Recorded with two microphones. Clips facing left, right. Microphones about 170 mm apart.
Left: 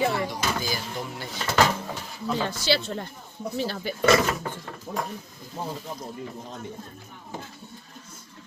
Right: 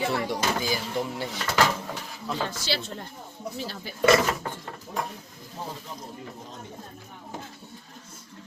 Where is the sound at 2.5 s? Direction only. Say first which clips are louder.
Left 6 dB; 70° left (ahead or behind).